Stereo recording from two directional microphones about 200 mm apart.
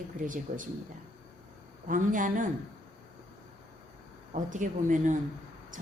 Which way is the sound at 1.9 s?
40° right (ahead or behind).